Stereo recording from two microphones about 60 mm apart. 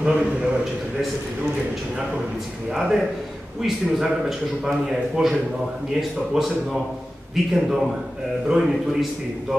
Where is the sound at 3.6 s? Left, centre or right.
Centre.